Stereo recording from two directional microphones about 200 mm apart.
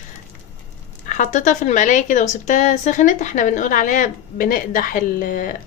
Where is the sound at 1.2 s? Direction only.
40° left (ahead or behind).